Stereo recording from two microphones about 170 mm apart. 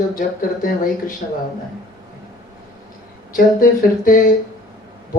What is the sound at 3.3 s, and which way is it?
Speech, 55° left (ahead or behind).